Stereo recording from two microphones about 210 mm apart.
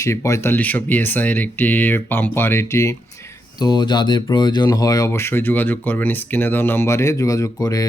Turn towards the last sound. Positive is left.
turn(degrees=15)  # may be behind; listen again after turning